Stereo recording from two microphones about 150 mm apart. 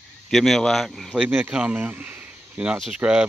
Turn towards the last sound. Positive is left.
turn(degrees=-5)  # may be behind; listen again after turning